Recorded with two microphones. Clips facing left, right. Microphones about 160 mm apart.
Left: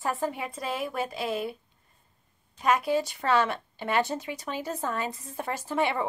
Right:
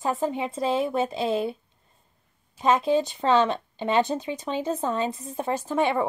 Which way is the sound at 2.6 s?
25° right (ahead or behind).